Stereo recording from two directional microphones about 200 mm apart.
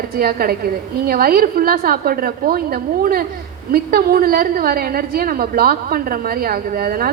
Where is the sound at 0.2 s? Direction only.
50° right (ahead or behind).